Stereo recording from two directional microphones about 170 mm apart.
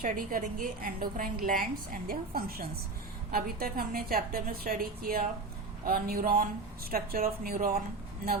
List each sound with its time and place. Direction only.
0.0 s a woman's voice: 55° right (ahead or behind)